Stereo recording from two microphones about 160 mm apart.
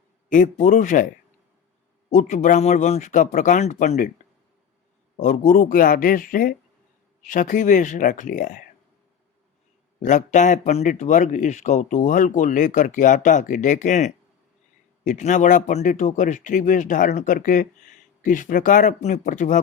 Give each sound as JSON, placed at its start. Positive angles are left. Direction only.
{"t": 0.3, "sound": "speech", "side_deg": 55}
{"t": 2.0, "sound": "speech", "side_deg": 50}
{"t": 5.2, "sound": "speech", "side_deg": 50}
{"t": 10.0, "sound": "speech", "side_deg": 50}